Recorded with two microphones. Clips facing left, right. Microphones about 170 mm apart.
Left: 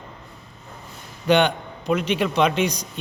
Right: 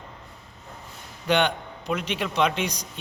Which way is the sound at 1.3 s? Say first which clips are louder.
Left 5 dB; 10° left (ahead or behind).